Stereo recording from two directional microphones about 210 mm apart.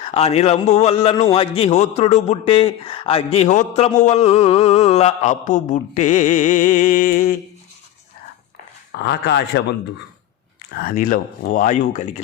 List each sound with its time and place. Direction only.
0.0 s a man's voice: 30° left (ahead or behind)
9.0 s speech: 50° left (ahead or behind)
10.8 s a man's voice: 40° left (ahead or behind)